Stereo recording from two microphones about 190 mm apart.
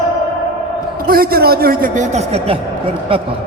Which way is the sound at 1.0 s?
50° right (ahead or behind).